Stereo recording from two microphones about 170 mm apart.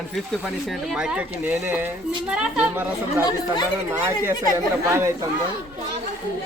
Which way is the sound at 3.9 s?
15° right (ahead or behind).